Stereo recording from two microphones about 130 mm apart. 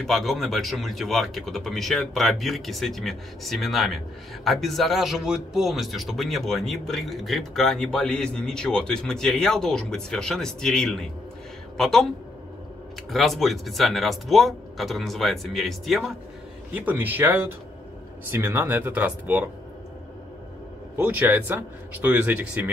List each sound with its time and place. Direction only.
0.0 s a man's voice: centre (ahead or behind)
13.1 s a man's voice: centre (ahead or behind)
16.7 s speech: 15° right (ahead or behind)
21.0 s speech: 15° right (ahead or behind)